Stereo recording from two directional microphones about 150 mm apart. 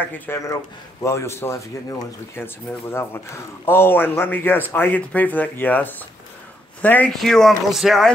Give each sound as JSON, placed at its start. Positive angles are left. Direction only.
{"t": 0.3, "sound": "a man's voice", "side_deg": 15}